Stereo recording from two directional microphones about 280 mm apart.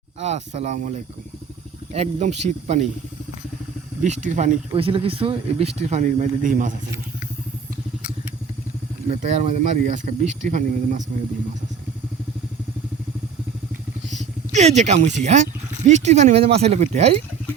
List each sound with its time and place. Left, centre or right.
0.2 s speech: right
4.0 s speech: right
9.0 s speech: right
14.1 s speech: right